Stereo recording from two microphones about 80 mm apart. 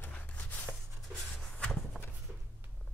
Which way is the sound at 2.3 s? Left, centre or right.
Centre.